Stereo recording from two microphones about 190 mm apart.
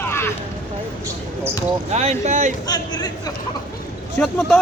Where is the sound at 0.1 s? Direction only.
15° left (ahead or behind).